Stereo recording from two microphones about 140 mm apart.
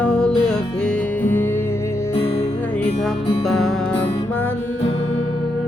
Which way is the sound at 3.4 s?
Centre (ahead or behind).